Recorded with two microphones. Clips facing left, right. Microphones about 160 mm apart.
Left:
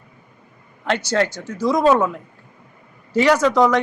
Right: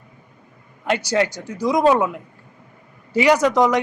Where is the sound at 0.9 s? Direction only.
10° right (ahead or behind).